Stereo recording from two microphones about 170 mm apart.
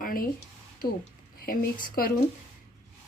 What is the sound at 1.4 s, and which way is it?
Speech, 60° left (ahead or behind).